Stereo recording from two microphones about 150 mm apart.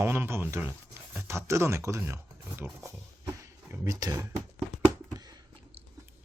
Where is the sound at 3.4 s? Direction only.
20° right (ahead or behind).